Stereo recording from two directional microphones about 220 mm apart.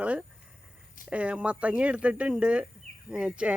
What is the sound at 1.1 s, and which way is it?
Speech, 5° right (ahead or behind).